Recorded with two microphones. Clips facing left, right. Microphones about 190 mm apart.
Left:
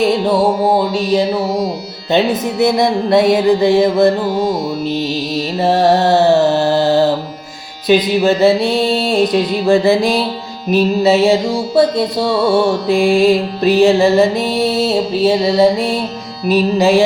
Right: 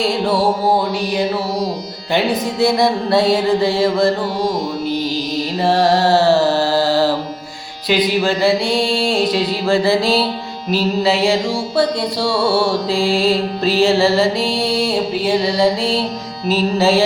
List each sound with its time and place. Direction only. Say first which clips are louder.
0.0 s music: left 4 dB; 20° left (ahead or behind)
5.5 s carnatic music: left 3 dB; 20° left (ahead or behind)
7.9 s music: left 4 dB; 20° left (ahead or behind)